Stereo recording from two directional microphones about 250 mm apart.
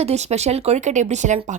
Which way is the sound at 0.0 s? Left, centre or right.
Right.